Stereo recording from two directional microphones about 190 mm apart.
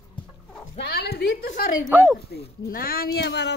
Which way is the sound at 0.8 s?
55° left (ahead or behind).